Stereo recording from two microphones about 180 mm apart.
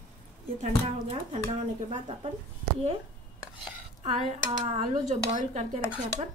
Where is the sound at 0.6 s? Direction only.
35° right (ahead or behind).